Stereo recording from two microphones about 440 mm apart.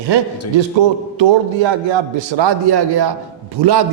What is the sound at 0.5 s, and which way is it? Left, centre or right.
A man's voice, right.